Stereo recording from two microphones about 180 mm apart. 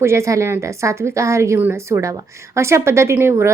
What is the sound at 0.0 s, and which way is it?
A woman's voice, 15° right (ahead or behind).